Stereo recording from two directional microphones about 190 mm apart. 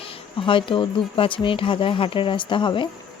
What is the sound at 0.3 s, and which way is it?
Speech, 25° left (ahead or behind).